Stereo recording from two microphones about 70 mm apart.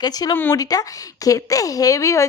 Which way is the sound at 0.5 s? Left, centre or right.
Left.